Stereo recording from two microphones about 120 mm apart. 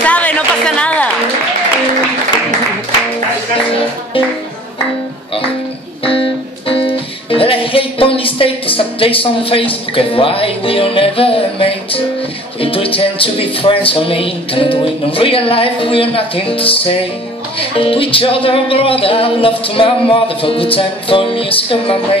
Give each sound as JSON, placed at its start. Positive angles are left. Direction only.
{"t": 0.0, "sound": "music", "side_deg": 10}
{"t": 6.0, "sound": "music", "side_deg": 45}